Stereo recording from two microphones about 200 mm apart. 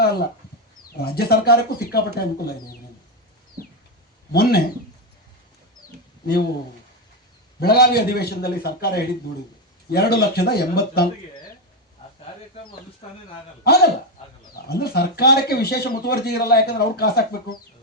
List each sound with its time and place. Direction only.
0.0 s a sound: 50° left (ahead or behind)
0.9 s speech: 50° left (ahead or behind)
4.3 s speech: 50° left (ahead or behind)
7.6 s speech: 50° left (ahead or behind)
14.5 s speech: 50° left (ahead or behind)